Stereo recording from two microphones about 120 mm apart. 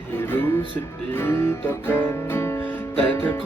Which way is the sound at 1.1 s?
15° left (ahead or behind).